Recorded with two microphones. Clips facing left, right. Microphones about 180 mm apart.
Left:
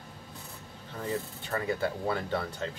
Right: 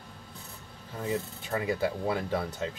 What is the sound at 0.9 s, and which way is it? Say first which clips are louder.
Speech: right 2 dB; 10° right (ahead or behind).